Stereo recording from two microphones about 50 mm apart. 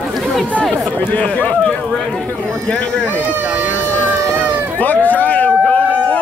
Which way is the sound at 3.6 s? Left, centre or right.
Right.